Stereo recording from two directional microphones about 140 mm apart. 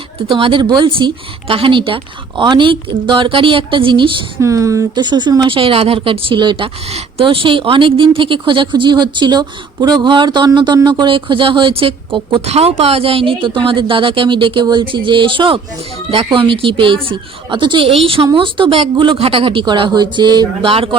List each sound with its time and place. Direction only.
0.3 s speech: 40° right (ahead or behind)
4.4 s speech: 20° right (ahead or behind)
5.5 s speech: 40° right (ahead or behind)